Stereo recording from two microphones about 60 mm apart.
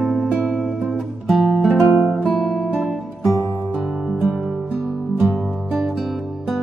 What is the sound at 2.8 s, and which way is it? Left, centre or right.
Music, centre.